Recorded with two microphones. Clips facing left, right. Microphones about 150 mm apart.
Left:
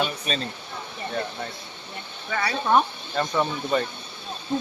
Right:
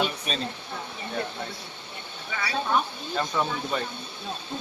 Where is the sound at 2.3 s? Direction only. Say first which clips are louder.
Left 5 dB; 50° left (ahead or behind).